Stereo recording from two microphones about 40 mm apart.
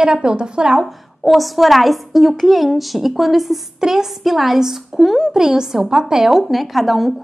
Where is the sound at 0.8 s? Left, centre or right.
Centre.